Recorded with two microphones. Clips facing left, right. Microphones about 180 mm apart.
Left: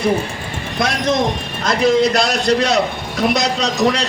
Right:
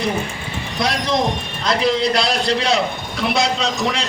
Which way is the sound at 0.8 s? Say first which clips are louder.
Left 2 dB; 50° left (ahead or behind).